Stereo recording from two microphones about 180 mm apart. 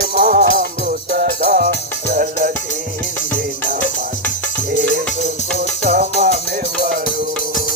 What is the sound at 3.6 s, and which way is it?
Music, 45° right (ahead or behind).